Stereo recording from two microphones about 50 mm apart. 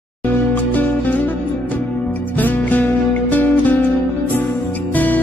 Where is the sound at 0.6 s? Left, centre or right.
Left.